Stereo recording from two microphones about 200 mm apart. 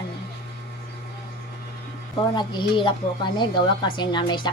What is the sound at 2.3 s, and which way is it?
A woman's voice, 20° left (ahead or behind).